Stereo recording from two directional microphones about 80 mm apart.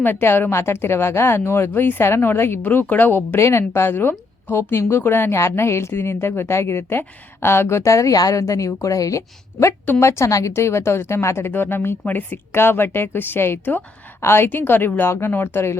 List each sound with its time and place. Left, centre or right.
0.0 s a woman's voice: left